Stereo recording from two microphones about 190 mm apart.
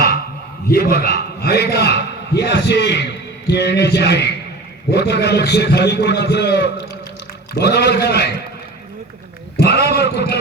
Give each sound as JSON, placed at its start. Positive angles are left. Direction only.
{"t": 0.7, "sound": "a man's voice", "side_deg": 55}
{"t": 9.6, "sound": "a man's voice", "side_deg": 60}